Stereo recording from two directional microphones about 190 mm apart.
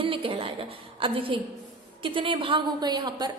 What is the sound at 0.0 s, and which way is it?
A woman's voice, 25° right (ahead or behind).